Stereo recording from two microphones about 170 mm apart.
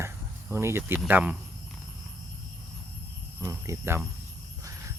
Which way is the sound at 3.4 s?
15° right (ahead or behind).